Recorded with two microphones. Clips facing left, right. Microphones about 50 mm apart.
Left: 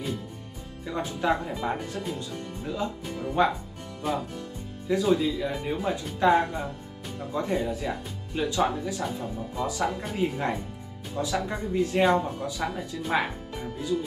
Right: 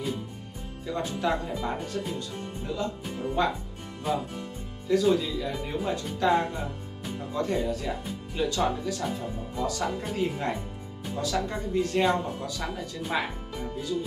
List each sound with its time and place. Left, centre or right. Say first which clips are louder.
0.8 s speech: left 2 dB; centre
4.1 s speech: even; centre
5.0 s speech: left 1 dB; centre